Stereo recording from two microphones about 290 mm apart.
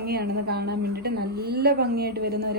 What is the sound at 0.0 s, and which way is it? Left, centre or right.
A woman's voice, right.